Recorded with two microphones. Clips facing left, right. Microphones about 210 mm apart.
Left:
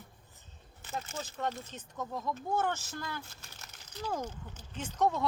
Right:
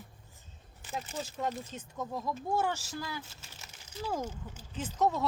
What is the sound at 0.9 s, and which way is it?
Speech, 10° right (ahead or behind).